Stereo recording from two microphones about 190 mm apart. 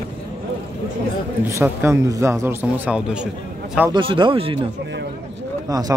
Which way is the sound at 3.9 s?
25° right (ahead or behind).